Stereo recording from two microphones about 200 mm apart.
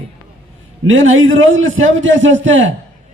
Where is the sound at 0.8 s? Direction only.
75° right (ahead or behind).